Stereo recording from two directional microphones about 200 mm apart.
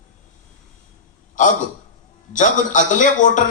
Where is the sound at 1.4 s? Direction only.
40° left (ahead or behind).